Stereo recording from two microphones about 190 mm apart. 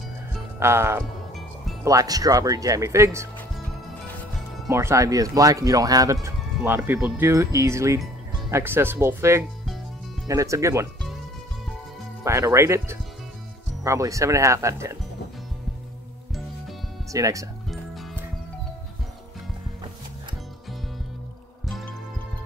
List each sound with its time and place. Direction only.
0.6 s speech: 15° right (ahead or behind)
4.6 s speech: 15° right (ahead or behind)
12.2 s speech: 15° right (ahead or behind)
17.1 s speech: 15° right (ahead or behind)